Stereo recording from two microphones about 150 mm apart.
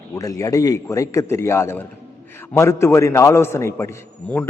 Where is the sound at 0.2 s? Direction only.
20° left (ahead or behind).